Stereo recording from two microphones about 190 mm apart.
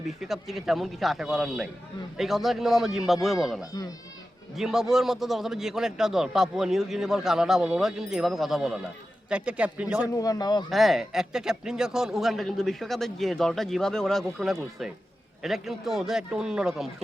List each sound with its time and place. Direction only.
0.2 s a man's voice: centre (ahead or behind)
10.2 s speech: 20° left (ahead or behind)
10.7 s a man's voice: centre (ahead or behind)